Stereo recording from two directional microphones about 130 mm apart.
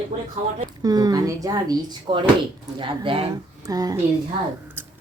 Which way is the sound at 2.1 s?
40° right (ahead or behind).